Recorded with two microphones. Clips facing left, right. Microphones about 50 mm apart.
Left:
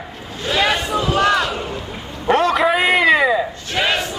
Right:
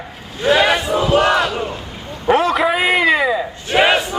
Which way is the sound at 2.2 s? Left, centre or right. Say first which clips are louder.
Right 1 dB; centre.